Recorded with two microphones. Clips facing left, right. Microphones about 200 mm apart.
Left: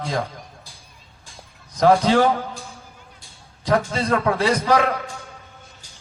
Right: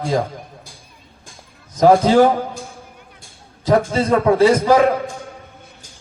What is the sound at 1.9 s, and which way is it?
Speech, 45° right (ahead or behind).